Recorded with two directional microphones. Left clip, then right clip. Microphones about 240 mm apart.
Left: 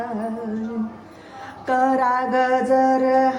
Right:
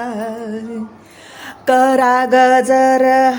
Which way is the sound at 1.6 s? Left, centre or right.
Right.